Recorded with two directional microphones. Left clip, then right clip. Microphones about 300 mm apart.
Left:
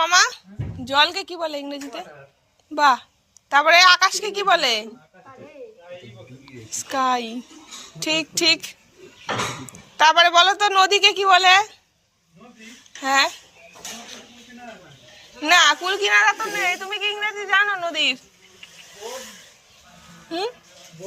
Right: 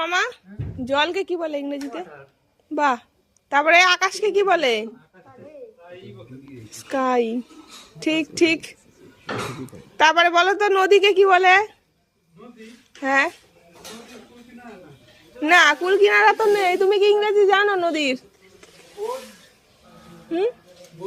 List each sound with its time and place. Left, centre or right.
0.0 s a woman's voice: centre
6.4 s a woman's voice: centre
10.0 s a woman's voice: centre
13.0 s a woman's voice: centre
15.4 s speech: centre